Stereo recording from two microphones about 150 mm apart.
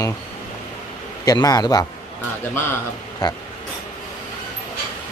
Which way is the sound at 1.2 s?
25° left (ahead or behind).